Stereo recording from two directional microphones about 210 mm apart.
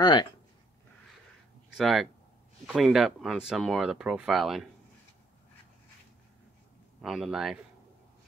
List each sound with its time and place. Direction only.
0.0 s speech: 20° left (ahead or behind)
1.8 s speech: centre (ahead or behind)
7.0 s speech: centre (ahead or behind)